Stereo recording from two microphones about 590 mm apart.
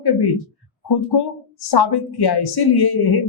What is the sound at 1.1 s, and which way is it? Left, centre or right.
Speech, left.